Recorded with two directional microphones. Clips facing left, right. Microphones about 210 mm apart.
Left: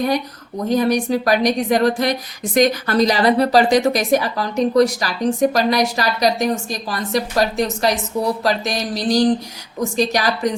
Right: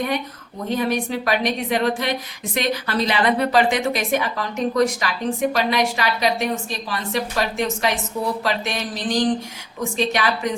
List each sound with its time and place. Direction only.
0.7 s a woman's voice: 40° left (ahead or behind)